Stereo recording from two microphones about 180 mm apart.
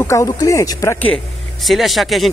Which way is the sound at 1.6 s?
Centre (ahead or behind).